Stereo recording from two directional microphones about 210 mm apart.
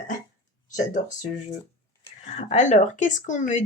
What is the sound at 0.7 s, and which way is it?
Speech, 35° left (ahead or behind).